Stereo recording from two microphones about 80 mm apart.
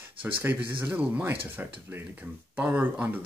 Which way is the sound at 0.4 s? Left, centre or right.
Right.